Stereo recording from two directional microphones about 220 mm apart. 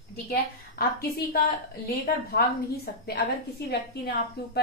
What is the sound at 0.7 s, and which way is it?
Speech, 45° left (ahead or behind).